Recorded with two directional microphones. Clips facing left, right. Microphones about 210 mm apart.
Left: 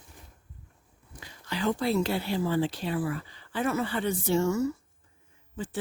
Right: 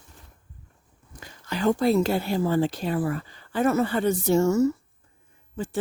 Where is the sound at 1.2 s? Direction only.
45° right (ahead or behind).